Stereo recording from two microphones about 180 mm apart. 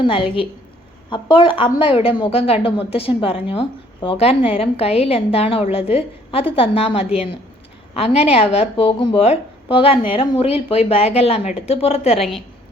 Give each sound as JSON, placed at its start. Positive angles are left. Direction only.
{"t": 0.0, "sound": "a woman's voice", "side_deg": 30}